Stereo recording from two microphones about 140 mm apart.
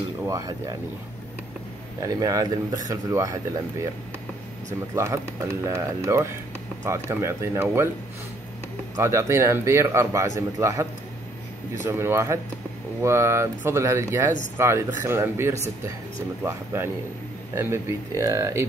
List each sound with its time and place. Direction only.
0.3 s speech: 25° right (ahead or behind)
2.0 s speech: 25° right (ahead or behind)
4.9 s speech: 20° right (ahead or behind)
8.9 s speech: 20° right (ahead or behind)
11.9 s speech: 20° right (ahead or behind)